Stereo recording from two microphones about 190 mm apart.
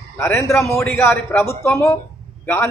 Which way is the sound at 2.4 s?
10° left (ahead or behind).